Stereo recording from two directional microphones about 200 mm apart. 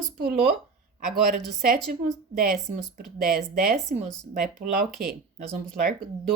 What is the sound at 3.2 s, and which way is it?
Speech, 45° right (ahead or behind).